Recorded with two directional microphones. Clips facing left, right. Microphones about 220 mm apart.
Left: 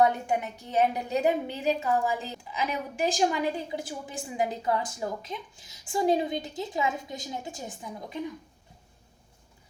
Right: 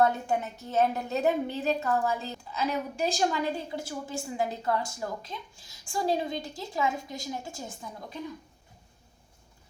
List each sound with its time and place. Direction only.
0.0 s a woman's voice: 15° left (ahead or behind)